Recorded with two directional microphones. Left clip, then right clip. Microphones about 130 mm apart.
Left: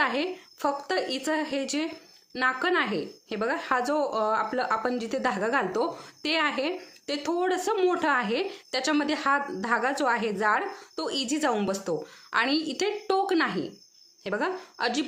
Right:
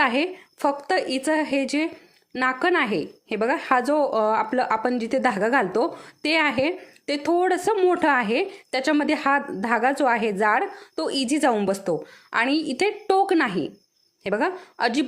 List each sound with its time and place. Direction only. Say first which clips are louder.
0.0 s speech: right 5 dB; 50° right (ahead or behind)